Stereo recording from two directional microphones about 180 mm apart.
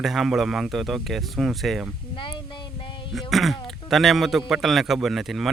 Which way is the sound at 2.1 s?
25° left (ahead or behind).